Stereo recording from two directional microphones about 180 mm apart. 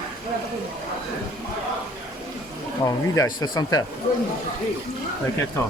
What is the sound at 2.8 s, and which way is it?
Speech, 20° left (ahead or behind).